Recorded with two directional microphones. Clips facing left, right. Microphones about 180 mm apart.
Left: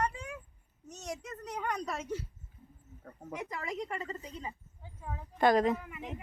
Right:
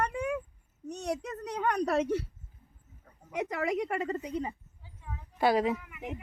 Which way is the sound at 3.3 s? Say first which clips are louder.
Right 8 dB; 70° right (ahead or behind).